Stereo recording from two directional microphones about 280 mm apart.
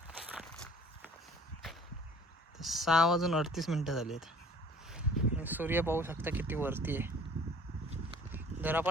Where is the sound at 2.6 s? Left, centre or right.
Centre.